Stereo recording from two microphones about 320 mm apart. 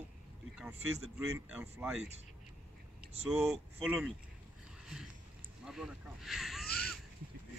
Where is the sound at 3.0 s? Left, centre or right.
Centre.